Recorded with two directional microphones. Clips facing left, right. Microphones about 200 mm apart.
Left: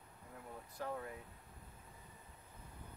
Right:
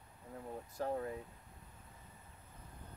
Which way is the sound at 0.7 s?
35° right (ahead or behind).